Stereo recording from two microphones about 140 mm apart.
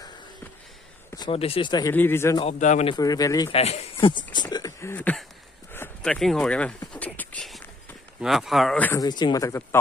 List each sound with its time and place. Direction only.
1.3 s speech: 45° left (ahead or behind)
1.9 s a man's voice: 15° left (ahead or behind)
2.6 s speech: 60° left (ahead or behind)
2.9 s speech: 25° left (ahead or behind)
3.5 s speech: 50° left (ahead or behind)
4.3 s speech: 30° left (ahead or behind); by 6.7 s 5° left (ahead or behind)
6.9 s a sound: 10° left (ahead or behind)
8.2 s speech: centre (ahead or behind)
8.7 s a man's voice: 10° left (ahead or behind)
9.0 s speech: 30° left (ahead or behind)